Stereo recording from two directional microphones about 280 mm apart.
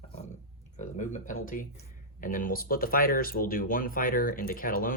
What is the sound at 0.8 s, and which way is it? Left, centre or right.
Speech, left.